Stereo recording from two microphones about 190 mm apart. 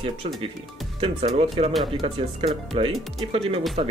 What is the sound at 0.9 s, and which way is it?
Speech, 30° right (ahead or behind).